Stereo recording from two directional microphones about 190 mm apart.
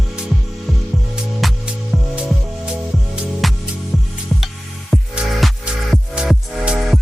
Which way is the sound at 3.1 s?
Centre (ahead or behind).